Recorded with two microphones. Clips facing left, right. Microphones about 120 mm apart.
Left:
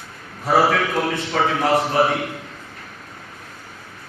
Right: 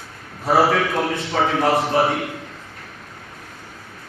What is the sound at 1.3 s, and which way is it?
Speech, 15° right (ahead or behind).